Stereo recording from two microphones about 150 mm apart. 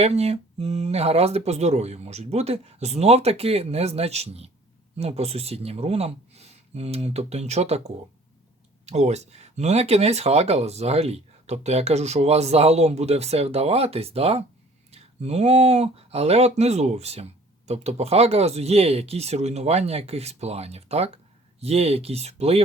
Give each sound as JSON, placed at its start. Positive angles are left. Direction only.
{"t": 0.0, "sound": "speech", "side_deg": -45}